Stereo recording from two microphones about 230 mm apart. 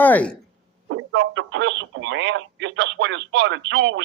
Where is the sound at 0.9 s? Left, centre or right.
Right.